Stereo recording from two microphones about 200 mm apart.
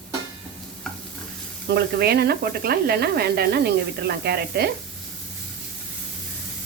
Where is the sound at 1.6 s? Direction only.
55° right (ahead or behind).